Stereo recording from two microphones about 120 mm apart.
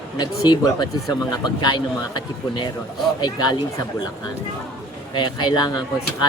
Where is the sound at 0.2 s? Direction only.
35° left (ahead or behind).